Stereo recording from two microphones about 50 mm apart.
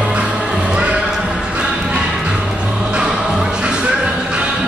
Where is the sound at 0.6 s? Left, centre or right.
Right.